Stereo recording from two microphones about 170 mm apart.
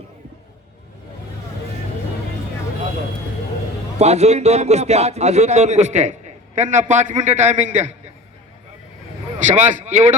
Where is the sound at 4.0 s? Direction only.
40° right (ahead or behind).